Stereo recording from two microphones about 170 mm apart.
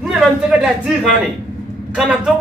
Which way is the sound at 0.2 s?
Centre (ahead or behind).